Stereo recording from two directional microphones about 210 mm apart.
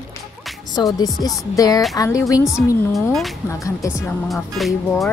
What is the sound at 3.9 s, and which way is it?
A woman's voice, centre (ahead or behind).